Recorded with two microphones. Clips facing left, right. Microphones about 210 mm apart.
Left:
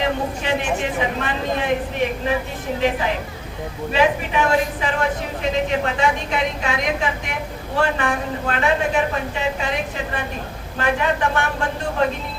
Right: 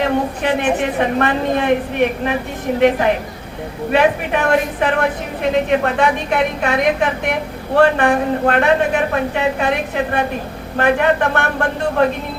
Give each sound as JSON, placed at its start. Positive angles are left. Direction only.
{"t": 0.4, "sound": "speech", "side_deg": -55}
{"t": 3.9, "sound": "speech", "side_deg": -60}